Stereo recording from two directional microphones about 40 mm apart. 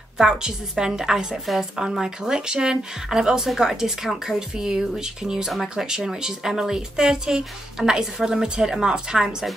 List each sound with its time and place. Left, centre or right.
0.2 s speech: centre
5.5 s speech: centre
5.9 s speech: centre